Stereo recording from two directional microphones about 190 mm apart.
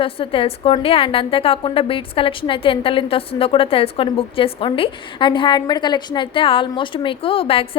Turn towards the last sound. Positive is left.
turn(degrees=30)  # may be behind; listen again after turning